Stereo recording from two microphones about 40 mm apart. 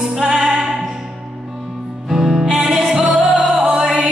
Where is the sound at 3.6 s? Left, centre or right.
Centre.